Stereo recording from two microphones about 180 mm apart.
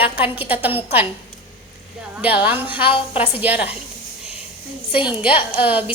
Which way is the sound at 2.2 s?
10° right (ahead or behind).